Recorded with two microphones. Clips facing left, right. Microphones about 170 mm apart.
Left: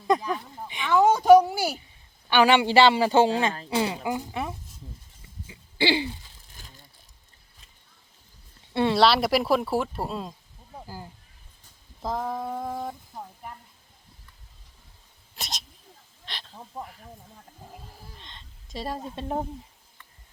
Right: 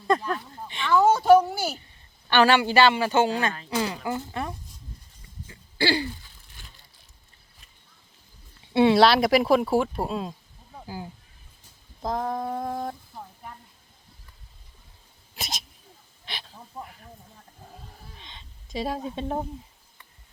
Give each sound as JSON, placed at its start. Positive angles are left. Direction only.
{"t": 0.1, "sound": "speech", "side_deg": 15}
{"t": 2.6, "sound": "speech", "side_deg": 25}
{"t": 5.5, "sound": "throat clearing", "side_deg": 20}
{"t": 6.6, "sound": "a sound", "side_deg": 40}
{"t": 8.7, "sound": "speech", "side_deg": 0}
{"t": 15.4, "sound": "cat", "side_deg": 0}
{"t": 16.2, "sound": "snake", "side_deg": -5}
{"t": 16.8, "sound": "speech", "side_deg": 0}
{"t": 18.2, "sound": "a sound", "side_deg": 0}